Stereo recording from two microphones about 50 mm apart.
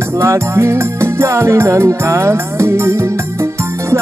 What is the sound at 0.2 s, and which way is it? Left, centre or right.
Music, right.